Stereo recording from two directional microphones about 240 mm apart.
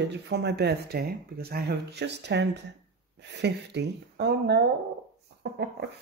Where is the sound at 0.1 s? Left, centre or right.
Right.